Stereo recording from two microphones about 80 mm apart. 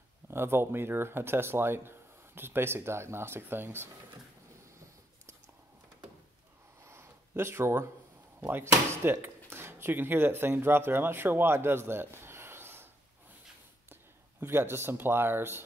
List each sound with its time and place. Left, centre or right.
0.3 s speech: right
6.9 s a sound: right
8.4 s speech: right
14.4 s speech: right